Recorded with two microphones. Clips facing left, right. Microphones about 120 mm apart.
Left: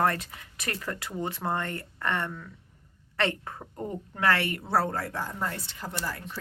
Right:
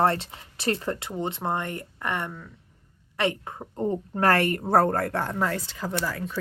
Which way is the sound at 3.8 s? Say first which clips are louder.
Right 9 dB; 25° right (ahead or behind).